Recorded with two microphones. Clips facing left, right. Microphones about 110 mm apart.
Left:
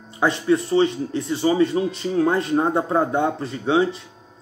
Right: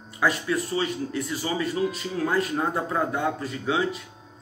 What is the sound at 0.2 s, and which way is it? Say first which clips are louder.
Speech: left 5 dB; 25° left (ahead or behind).